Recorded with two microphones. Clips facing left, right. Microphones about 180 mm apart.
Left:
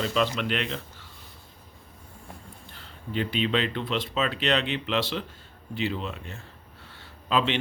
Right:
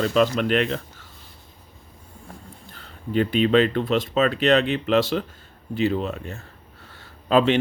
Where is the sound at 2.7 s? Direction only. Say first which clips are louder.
Right 8 dB; 45° right (ahead or behind).